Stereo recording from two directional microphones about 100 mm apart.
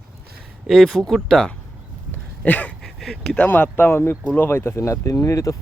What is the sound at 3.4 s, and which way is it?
Speech, 20° left (ahead or behind).